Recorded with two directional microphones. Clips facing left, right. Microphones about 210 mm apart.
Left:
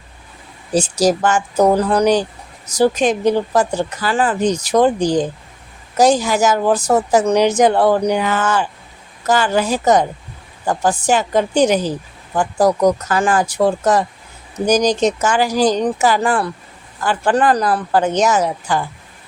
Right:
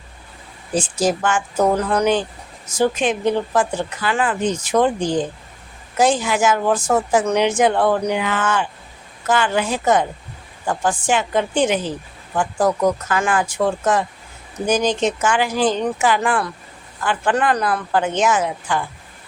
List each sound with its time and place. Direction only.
0.7 s speech: 40° left (ahead or behind)